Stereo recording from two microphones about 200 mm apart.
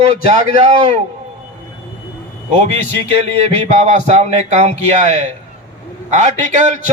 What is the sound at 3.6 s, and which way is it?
Speech, 35° right (ahead or behind).